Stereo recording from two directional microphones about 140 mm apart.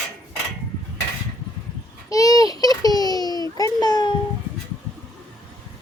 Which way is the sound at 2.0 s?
25° left (ahead or behind).